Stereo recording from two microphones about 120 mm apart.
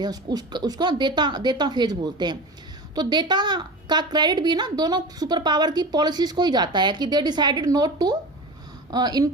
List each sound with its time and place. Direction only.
0.0 s a woman's voice: 35° right (ahead or behind)